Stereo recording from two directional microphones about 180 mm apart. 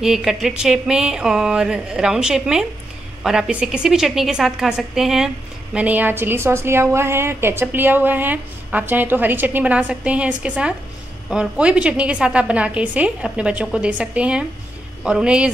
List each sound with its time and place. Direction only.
0.0 s a woman's voice: 5° right (ahead or behind)